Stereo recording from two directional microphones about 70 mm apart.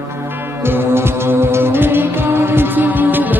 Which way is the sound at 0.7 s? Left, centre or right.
Right.